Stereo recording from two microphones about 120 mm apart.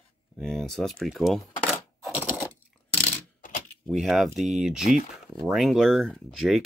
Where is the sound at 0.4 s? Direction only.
5° left (ahead or behind).